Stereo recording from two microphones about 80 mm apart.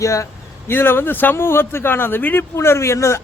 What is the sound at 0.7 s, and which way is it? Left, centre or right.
A man's voice, left.